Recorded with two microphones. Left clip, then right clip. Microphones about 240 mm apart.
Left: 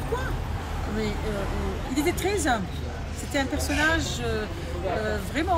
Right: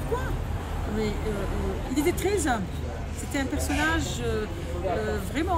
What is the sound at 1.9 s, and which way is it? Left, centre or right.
Speech, centre.